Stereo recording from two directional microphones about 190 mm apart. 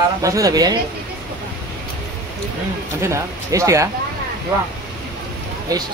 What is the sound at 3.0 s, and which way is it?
Speech, 15° right (ahead or behind).